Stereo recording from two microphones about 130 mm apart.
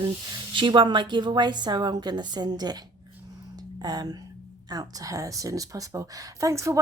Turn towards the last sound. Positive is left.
turn(degrees=-25)  # may be behind; listen again after turning